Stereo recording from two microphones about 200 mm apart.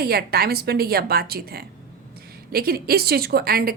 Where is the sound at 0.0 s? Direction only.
50° right (ahead or behind).